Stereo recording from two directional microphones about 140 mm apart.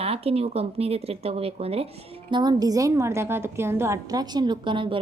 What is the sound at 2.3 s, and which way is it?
A woman's voice, 30° right (ahead or behind).